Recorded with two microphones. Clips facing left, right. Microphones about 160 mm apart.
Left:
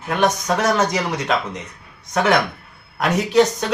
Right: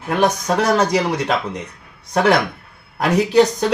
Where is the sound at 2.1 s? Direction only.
35° right (ahead or behind).